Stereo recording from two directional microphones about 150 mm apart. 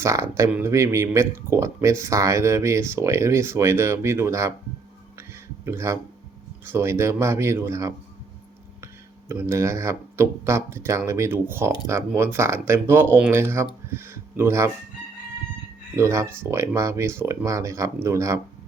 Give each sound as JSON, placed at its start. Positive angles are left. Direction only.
{"t": 0.0, "sound": "speech", "side_deg": -20}
{"t": 5.6, "sound": "speech", "side_deg": -20}
{"t": 9.3, "sound": "speech", "side_deg": -20}
{"t": 16.0, "sound": "speech", "side_deg": -20}